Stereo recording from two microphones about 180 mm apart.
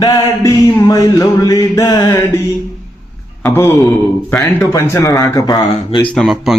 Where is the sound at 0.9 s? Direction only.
20° left (ahead or behind).